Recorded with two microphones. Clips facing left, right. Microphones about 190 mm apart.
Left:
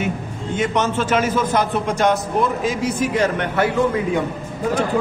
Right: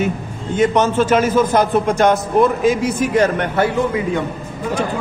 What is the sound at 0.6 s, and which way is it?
A man's voice, 40° right (ahead or behind).